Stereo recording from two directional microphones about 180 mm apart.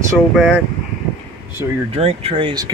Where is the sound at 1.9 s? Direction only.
35° right (ahead or behind).